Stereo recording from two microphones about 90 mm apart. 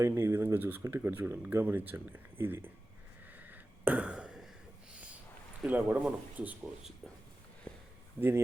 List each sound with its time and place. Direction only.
0.0 s speech: 30° right (ahead or behind)
3.3 s a sound: 20° right (ahead or behind)
5.6 s speech: 15° right (ahead or behind)